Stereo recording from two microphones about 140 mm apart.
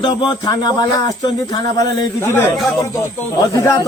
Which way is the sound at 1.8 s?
15° left (ahead or behind).